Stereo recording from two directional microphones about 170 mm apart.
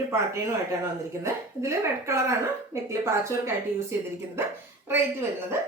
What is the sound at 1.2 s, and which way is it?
Speech, 15° right (ahead or behind).